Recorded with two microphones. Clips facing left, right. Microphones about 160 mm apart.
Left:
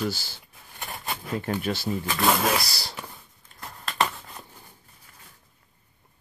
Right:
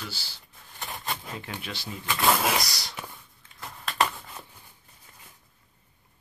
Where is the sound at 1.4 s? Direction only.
45° left (ahead or behind).